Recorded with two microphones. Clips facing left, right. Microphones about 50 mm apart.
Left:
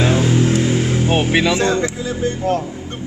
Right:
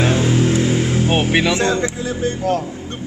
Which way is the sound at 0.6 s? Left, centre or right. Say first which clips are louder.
Even; centre.